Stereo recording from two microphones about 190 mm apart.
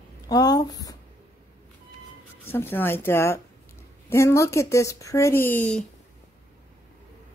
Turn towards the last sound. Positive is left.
turn(degrees=5)  # may be behind; listen again after turning